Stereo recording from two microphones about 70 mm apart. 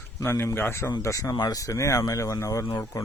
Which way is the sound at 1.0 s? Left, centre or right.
Left.